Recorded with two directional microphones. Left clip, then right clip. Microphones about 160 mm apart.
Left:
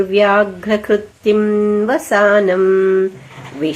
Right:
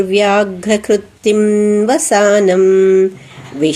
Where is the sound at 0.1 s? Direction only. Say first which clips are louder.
Left 1 dB; 35° right (ahead or behind).